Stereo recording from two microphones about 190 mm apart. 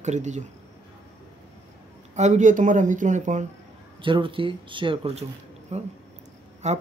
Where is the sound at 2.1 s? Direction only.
40° right (ahead or behind).